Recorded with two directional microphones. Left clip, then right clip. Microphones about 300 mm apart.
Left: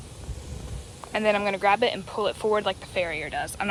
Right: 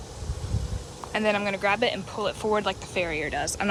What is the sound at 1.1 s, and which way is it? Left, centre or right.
Speech, centre.